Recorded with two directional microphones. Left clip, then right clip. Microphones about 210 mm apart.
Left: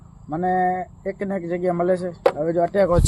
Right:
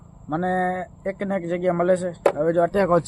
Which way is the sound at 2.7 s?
35° right (ahead or behind).